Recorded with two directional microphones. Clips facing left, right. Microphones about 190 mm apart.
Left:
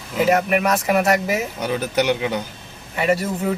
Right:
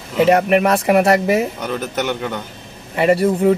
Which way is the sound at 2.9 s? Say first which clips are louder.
Right 5 dB; 30° right (ahead or behind).